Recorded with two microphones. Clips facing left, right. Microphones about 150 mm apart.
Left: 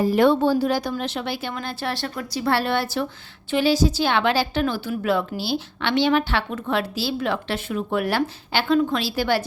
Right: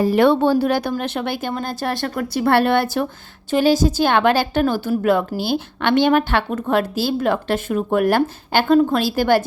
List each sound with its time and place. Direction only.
0.0 s a woman's voice: 70° right (ahead or behind); by 9.4 s 50° right (ahead or behind)